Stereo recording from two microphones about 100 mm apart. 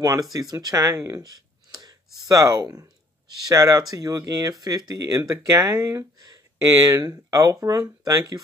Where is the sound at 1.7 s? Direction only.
40° right (ahead or behind).